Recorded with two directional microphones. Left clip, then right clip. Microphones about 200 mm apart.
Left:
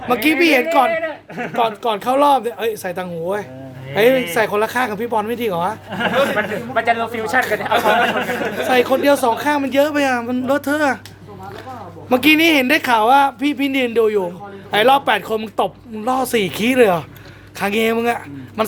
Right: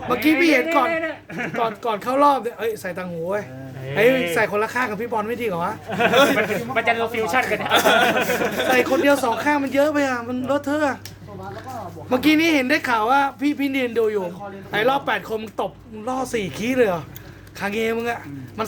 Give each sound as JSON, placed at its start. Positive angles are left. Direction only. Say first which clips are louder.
{"t": 0.1, "sound": "speech", "louder": "left 3 dB", "side_deg": 35}
{"t": 0.9, "sound": "a sound", "louder": "left 4 dB", "side_deg": 10}
{"t": 1.5, "sound": "speech", "louder": "left 5 dB", "side_deg": 30}
{"t": 6.7, "sound": "speech", "louder": "left 3 dB", "side_deg": 15}
{"t": 7.7, "sound": "speech", "louder": "even", "side_deg": -50}
{"t": 8.7, "sound": "speech", "louder": "left 4 dB", "side_deg": 25}
{"t": 12.0, "sound": "speech", "louder": "left 5 dB", "side_deg": 35}